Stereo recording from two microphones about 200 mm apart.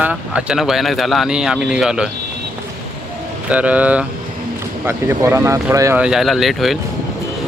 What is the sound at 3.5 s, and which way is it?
Speech, 5° right (ahead or behind).